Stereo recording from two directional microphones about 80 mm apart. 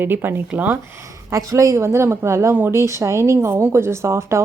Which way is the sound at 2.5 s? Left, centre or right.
Right.